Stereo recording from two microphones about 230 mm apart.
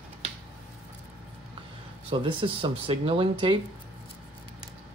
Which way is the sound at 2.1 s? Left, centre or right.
Right.